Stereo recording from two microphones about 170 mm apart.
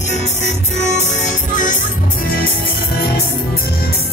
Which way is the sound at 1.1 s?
50° left (ahead or behind).